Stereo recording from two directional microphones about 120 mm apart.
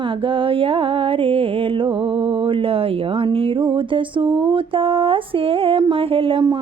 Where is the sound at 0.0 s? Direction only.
45° right (ahead or behind).